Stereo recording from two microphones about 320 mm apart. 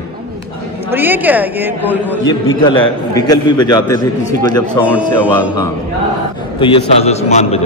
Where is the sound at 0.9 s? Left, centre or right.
Centre.